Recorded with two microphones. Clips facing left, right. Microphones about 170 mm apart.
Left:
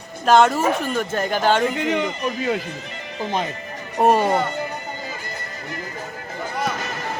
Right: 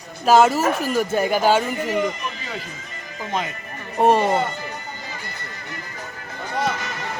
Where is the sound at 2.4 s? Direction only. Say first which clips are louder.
Left 9 dB; 65° left (ahead or behind).